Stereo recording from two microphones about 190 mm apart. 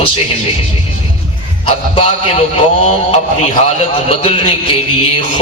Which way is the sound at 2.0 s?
30° left (ahead or behind).